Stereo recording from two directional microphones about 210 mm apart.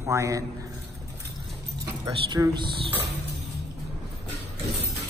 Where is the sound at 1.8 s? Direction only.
15° right (ahead or behind).